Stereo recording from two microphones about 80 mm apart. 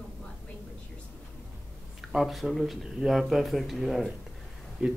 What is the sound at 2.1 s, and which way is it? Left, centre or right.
Speech, centre.